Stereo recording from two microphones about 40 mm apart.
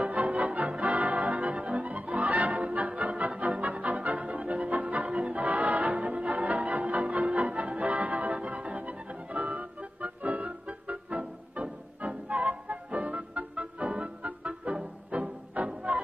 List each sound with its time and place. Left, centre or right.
0.0 s music: right